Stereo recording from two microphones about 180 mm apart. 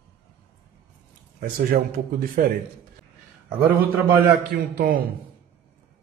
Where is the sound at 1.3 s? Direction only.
55° right (ahead or behind).